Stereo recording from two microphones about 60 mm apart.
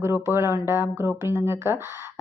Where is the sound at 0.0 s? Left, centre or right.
Right.